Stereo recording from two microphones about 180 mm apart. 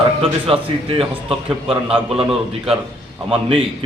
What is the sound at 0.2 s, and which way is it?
A man's voice, 30° right (ahead or behind).